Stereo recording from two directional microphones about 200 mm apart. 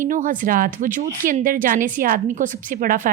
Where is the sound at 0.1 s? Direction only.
40° right (ahead or behind).